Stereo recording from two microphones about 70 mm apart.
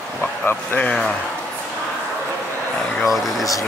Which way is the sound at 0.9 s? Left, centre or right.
Centre.